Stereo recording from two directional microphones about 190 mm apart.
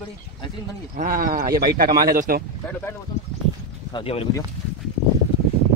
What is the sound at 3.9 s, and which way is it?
Speech, 30° left (ahead or behind).